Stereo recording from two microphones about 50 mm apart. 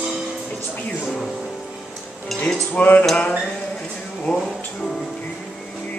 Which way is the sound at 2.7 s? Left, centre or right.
Left.